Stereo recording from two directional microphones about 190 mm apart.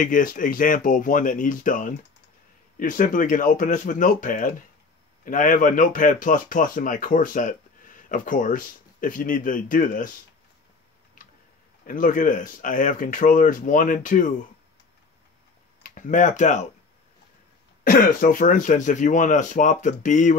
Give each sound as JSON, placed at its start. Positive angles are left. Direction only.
{"t": 0.0, "sound": "speech", "side_deg": 45}
{"t": 11.2, "sound": "a sound", "side_deg": 45}
{"t": 11.8, "sound": "speech", "side_deg": 45}
{"t": 15.8, "sound": "speech", "side_deg": 40}
{"t": 17.8, "sound": "speech", "side_deg": 50}